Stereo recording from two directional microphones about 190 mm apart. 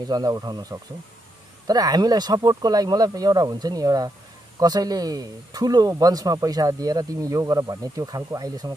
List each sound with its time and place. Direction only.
0.0 s speech: 20° right (ahead or behind)